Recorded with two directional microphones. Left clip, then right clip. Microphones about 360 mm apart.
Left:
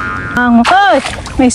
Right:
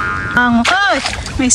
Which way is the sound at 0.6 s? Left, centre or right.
Centre.